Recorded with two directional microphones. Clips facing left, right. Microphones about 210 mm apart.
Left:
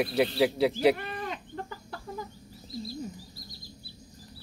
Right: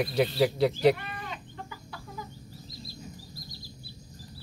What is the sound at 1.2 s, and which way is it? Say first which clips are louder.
Chicken: left 5 dB; 45° left (ahead or behind).